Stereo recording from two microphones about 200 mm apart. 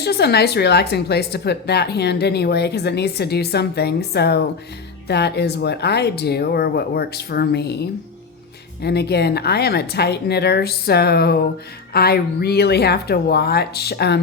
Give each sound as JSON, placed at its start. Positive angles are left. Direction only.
{"t": 0.0, "sound": "a woman's voice", "side_deg": 55}